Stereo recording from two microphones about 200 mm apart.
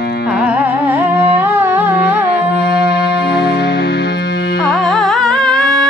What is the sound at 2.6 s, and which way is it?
Music, 55° left (ahead or behind).